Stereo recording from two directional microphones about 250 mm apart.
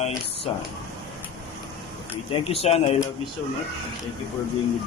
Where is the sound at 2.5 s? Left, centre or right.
Left.